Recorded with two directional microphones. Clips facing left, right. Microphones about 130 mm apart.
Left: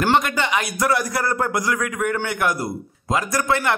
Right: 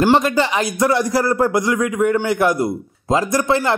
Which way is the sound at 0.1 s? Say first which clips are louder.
Right 4 dB; 30° right (ahead or behind).